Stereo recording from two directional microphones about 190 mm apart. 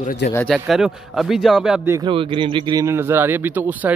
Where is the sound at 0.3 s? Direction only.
10° left (ahead or behind).